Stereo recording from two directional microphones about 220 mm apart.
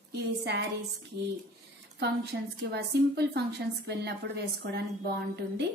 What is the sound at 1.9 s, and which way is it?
A woman's voice, 50° right (ahead or behind).